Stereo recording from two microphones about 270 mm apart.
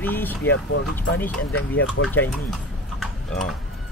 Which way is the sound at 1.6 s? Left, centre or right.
Left.